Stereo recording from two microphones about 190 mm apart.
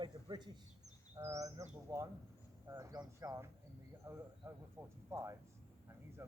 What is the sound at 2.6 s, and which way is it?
Speech, 20° right (ahead or behind).